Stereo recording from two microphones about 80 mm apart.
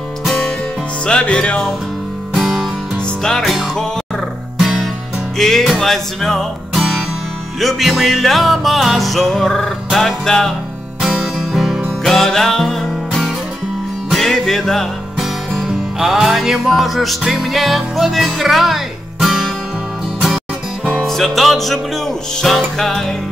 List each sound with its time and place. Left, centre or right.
0.2 s music: centre
1.0 s music: centre
11.0 s music: centre
20.8 s music: centre